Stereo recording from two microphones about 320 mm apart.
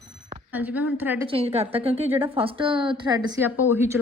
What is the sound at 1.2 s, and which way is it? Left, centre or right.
A woman's voice, centre.